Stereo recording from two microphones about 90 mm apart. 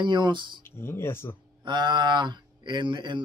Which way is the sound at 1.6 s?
55° right (ahead or behind).